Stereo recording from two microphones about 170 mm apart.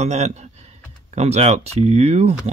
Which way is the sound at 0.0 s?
40° right (ahead or behind).